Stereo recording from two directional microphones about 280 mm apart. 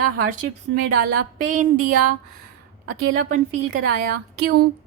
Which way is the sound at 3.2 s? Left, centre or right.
Right.